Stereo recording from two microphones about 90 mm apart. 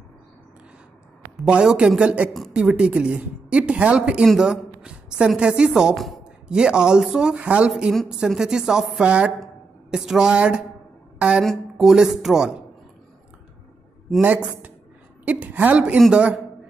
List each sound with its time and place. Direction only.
1.3 s a woman's voice: 10° right (ahead or behind)
7.7 s a woman's voice: centre (ahead or behind)
14.2 s a woman's voice: 20° right (ahead or behind)